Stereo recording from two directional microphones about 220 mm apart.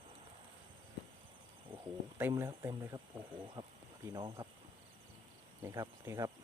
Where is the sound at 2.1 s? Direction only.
10° right (ahead or behind).